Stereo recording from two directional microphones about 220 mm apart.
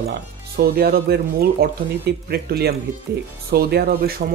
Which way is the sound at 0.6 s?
45° right (ahead or behind).